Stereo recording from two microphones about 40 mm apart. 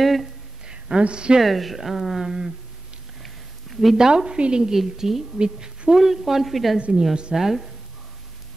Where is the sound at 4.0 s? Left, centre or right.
Centre.